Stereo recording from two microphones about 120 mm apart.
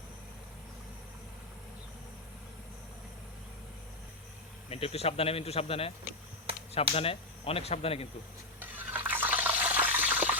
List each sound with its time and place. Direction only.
4.7 s speech: 55° left (ahead or behind)
6.9 s speech: 55° left (ahead or behind)
8.5 s water: 15° right (ahead or behind)